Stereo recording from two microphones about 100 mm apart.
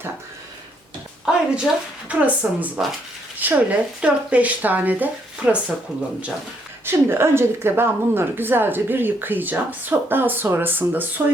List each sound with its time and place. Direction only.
1.2 s a sound: 5° right (ahead or behind)
2.0 s speech: 15° right (ahead or behind)
6.8 s a woman's voice: 25° right (ahead or behind)